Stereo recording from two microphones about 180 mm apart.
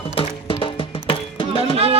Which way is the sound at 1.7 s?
35° right (ahead or behind).